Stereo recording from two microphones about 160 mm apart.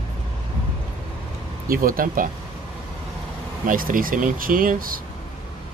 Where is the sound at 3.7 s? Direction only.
60° right (ahead or behind).